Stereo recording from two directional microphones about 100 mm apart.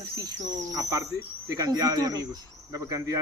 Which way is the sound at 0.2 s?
35° right (ahead or behind).